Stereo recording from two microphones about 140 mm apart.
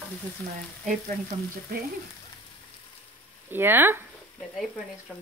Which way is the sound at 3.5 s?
15° right (ahead or behind).